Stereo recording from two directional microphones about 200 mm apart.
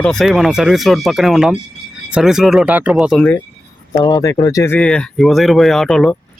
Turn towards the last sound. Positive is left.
turn(degrees=0)  # may be behind; listen again after turning